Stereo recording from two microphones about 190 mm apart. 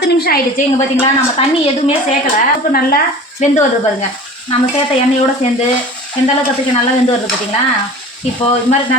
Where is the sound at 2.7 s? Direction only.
45° left (ahead or behind).